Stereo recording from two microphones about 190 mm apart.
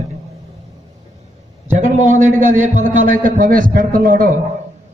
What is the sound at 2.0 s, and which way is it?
A man's voice, 40° right (ahead or behind).